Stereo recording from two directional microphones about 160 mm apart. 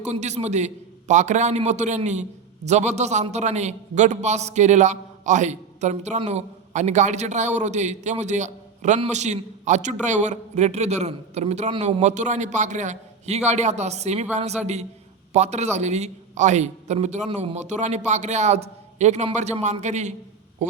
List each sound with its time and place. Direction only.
0.0 s a man's voice: 45° right (ahead or behind)